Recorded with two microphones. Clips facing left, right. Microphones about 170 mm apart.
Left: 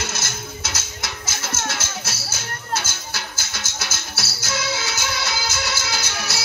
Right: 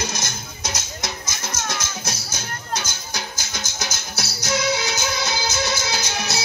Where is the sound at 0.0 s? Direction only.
15° right (ahead or behind).